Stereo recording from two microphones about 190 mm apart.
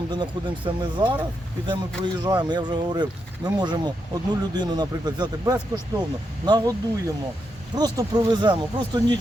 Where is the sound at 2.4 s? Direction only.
20° right (ahead or behind).